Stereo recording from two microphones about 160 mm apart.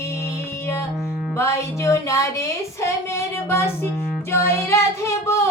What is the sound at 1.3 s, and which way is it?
Music, 20° left (ahead or behind).